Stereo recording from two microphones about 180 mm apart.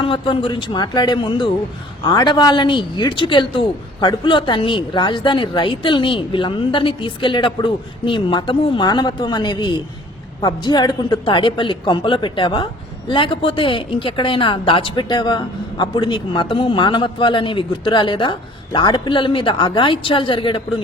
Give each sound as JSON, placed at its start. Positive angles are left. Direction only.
{"t": 0.0, "sound": "a woman's voice", "side_deg": 30}